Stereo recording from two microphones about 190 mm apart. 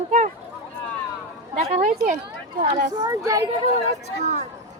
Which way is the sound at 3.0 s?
15° right (ahead or behind).